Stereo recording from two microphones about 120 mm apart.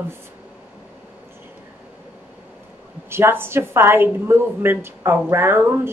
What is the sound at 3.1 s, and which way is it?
Speech, 20° right (ahead or behind).